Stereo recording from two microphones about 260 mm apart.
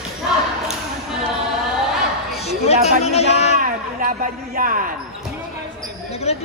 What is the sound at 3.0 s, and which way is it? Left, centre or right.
Speech, left.